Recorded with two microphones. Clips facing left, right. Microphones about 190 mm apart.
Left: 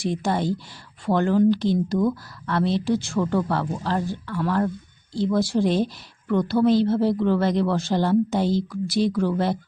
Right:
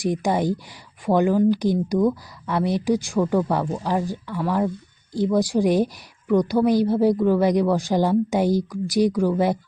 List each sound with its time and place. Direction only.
0.0 s a woman's voice: 15° right (ahead or behind)